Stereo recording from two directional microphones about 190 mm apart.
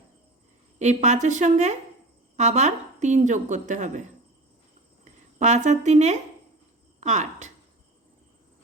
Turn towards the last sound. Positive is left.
turn(degrees=-40)  # may be behind; listen again after turning